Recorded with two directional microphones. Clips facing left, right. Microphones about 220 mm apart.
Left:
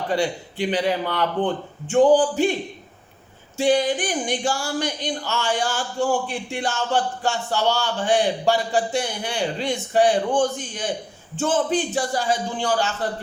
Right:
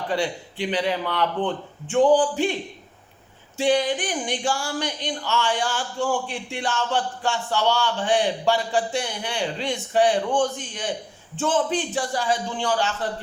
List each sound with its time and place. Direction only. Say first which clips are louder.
0.1 s speech: left 2 dB; 45° left (ahead or behind)
3.6 s speech: left 2 dB; 45° left (ahead or behind)